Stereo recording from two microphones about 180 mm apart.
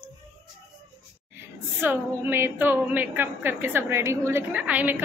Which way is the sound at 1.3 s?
10° right (ahead or behind).